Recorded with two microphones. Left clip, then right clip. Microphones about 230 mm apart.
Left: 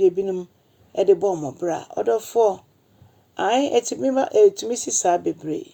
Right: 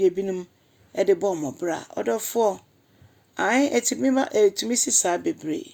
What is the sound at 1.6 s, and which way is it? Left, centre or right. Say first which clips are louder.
Speech: left 3 dB; right.